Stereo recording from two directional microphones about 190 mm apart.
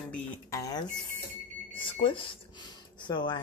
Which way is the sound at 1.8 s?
25° left (ahead or behind).